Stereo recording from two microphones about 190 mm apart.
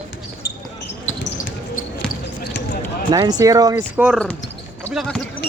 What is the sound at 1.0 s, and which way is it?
Basketball bounce, 75° left (ahead or behind).